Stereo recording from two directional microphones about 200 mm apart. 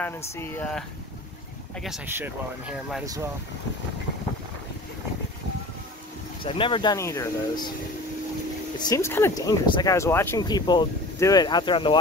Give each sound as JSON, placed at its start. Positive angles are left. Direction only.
{"t": 0.0, "sound": "speech", "side_deg": 10}
{"t": 6.4, "sound": "speech", "side_deg": 25}
{"t": 8.7, "sound": "speech", "side_deg": 20}